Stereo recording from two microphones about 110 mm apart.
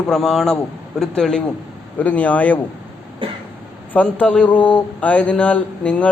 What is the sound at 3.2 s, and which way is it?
Cough, 50° right (ahead or behind).